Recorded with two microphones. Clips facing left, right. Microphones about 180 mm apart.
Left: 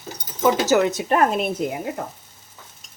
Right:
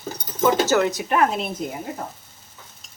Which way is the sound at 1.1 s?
45° left (ahead or behind).